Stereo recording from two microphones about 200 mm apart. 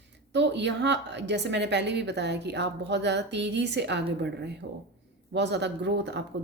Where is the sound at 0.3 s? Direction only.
60° right (ahead or behind).